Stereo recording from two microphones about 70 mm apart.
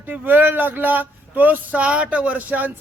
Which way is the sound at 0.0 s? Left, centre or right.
Right.